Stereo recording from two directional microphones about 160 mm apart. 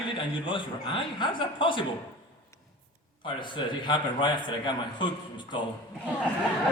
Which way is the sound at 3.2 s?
30° left (ahead or behind).